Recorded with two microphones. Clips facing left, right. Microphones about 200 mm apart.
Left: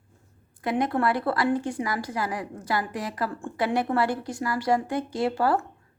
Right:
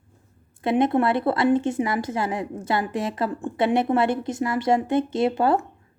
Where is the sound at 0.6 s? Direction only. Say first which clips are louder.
Right 5 dB; 25° right (ahead or behind).